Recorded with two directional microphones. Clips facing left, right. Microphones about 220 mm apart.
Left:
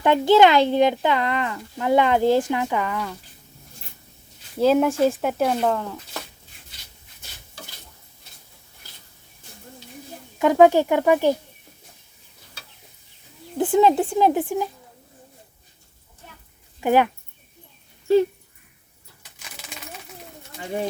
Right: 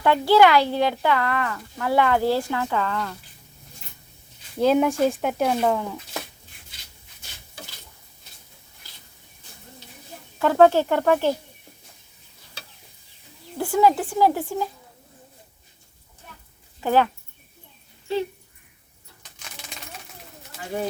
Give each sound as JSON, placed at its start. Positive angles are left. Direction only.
{"t": 0.0, "sound": "speech", "side_deg": 20}
{"t": 4.5, "sound": "speech", "side_deg": 5}
{"t": 10.3, "sound": "speech", "side_deg": 15}
{"t": 13.6, "sound": "speech", "side_deg": 20}
{"t": 16.8, "sound": "speech", "side_deg": 15}